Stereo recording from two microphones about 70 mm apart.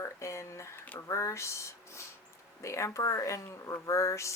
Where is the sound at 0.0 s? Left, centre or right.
Left.